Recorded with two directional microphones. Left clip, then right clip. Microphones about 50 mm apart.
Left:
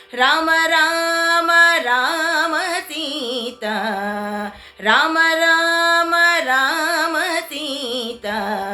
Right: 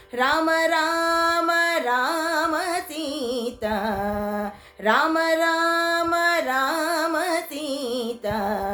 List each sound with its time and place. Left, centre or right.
0.2 s music: right
3.7 s a sound: right
4.9 s music: right